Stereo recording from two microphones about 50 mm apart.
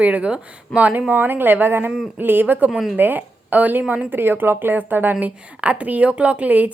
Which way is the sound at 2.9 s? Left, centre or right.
Right.